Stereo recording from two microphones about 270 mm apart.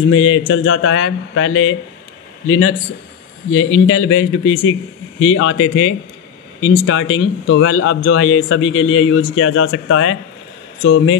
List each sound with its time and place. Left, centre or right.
0.1 s a man's voice: left